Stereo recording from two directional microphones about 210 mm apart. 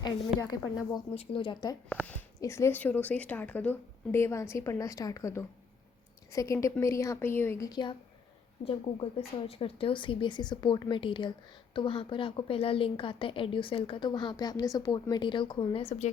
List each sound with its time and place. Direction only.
0.3 s speech: 15° left (ahead or behind)
1.9 s speech: 5° left (ahead or behind); by 16.0 s 30° left (ahead or behind)